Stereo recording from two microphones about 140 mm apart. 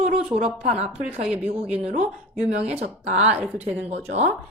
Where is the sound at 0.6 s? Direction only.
55° right (ahead or behind).